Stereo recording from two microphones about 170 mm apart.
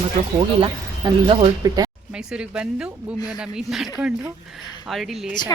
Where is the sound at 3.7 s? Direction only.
Centre (ahead or behind).